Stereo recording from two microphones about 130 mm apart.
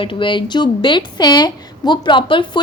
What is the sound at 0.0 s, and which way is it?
A woman's voice, 40° left (ahead or behind).